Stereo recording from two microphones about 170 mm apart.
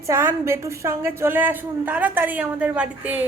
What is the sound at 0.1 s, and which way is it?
A woman's voice, 15° right (ahead or behind).